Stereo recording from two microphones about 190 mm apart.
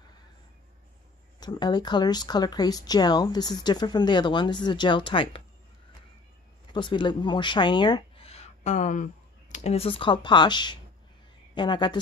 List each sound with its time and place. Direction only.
1.4 s speech: 20° left (ahead or behind)
6.7 s speech: 25° left (ahead or behind)